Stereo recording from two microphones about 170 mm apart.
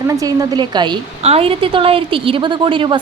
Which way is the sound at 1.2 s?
35° right (ahead or behind).